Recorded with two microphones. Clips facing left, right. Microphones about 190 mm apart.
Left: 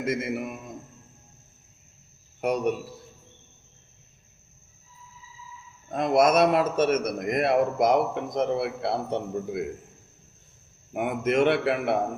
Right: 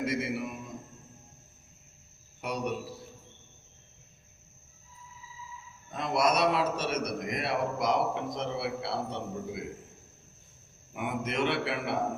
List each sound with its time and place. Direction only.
0.0 s a man's voice: 50° left (ahead or behind)
2.4 s a man's voice: 50° left (ahead or behind)
5.9 s a man's voice: 50° left (ahead or behind)
10.9 s a man's voice: 50° left (ahead or behind)